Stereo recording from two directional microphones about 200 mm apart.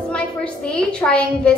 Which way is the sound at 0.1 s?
5° left (ahead or behind).